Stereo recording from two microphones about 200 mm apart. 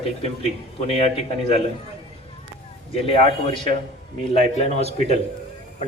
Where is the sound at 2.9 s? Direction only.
30° left (ahead or behind).